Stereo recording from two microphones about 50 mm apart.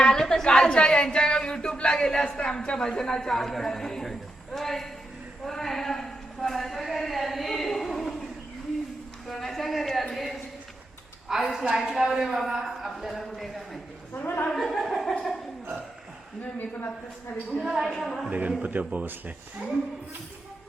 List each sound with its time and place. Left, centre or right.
0.0 s a woman's voice: centre
9.2 s a man's voice: centre
14.1 s a woman's voice: left
14.4 s a man's voice: centre
16.4 s a woman's voice: left
17.6 s a woman's voice: centre
18.3 s speech: right